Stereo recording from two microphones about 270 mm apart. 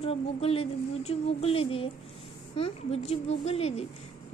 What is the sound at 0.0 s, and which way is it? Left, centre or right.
A woman's voice, left.